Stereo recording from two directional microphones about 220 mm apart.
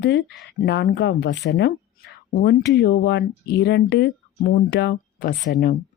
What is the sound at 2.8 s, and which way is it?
Speech, 50° left (ahead or behind).